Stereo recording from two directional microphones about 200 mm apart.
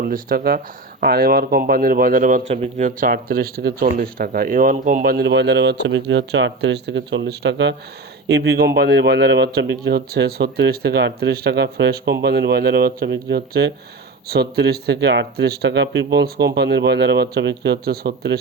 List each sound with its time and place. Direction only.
0.0 s speech: 45° right (ahead or behind)
5.1 s a man's voice: 60° right (ahead or behind)